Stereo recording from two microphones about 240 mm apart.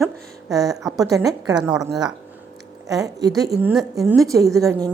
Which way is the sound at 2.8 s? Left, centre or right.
Centre.